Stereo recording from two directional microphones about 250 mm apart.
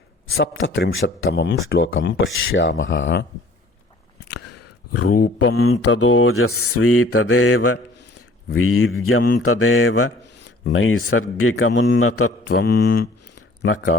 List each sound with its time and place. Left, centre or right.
0.3 s speech: left
4.3 s a sound: left
5.9 s mantra: left
12.6 s speech: left
13.6 s speech: left